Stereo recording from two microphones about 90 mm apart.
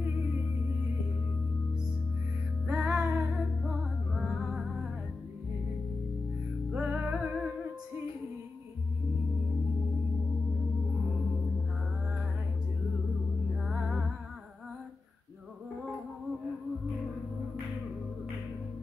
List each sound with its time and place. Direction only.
2.6 s music: 15° right (ahead or behind)
3.6 s music: 5° right (ahead or behind)
6.7 s music: 20° right (ahead or behind)
13.6 s music: 5° right (ahead or behind)